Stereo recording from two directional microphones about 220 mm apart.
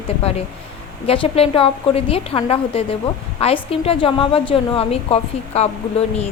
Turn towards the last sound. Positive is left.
turn(degrees=30)  # may be behind; listen again after turning